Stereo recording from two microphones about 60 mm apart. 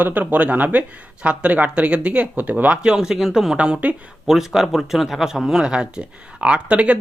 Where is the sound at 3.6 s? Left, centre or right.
Centre.